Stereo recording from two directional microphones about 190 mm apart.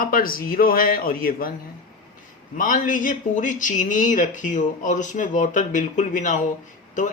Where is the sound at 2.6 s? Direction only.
45° left (ahead or behind).